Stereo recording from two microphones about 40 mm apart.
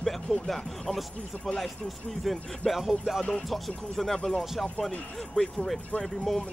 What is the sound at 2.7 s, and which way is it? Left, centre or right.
Music, centre.